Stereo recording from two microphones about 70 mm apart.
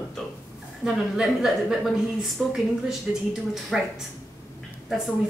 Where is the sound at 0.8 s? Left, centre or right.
Centre.